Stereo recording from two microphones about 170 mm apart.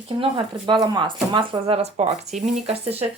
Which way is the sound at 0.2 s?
30° right (ahead or behind).